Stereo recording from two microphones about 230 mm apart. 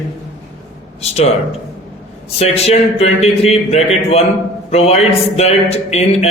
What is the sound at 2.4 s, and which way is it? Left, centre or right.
A man's voice, left.